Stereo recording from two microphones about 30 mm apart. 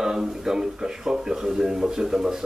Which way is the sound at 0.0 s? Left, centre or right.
Centre.